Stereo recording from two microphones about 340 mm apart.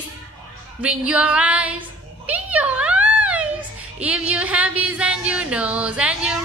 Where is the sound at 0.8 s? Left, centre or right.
Centre.